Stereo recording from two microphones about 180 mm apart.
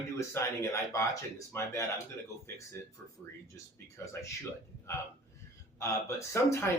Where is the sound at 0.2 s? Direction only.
15° left (ahead or behind).